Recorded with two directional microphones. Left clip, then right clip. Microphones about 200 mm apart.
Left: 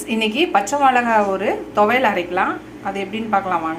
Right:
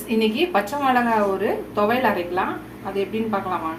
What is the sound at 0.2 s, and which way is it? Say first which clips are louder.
A woman's voice: left 3 dB; 15° left (ahead or behind).